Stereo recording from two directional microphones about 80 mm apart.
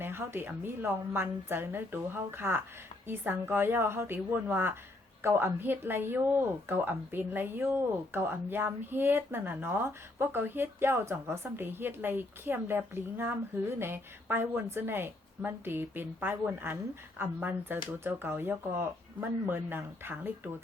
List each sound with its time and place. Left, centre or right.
0.0 s a woman's voice: right